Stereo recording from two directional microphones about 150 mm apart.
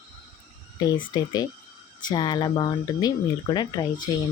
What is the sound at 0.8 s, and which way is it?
Speech, 25° left (ahead or behind).